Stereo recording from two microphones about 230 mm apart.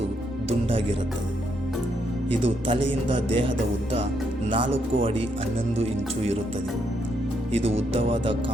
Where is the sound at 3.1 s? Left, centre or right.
Right.